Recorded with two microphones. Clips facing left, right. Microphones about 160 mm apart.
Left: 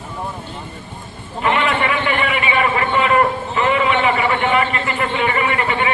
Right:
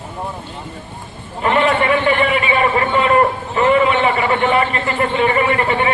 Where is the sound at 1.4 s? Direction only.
40° right (ahead or behind).